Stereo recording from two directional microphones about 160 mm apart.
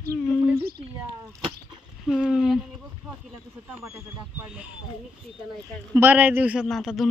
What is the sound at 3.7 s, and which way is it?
Speech, 5° right (ahead or behind).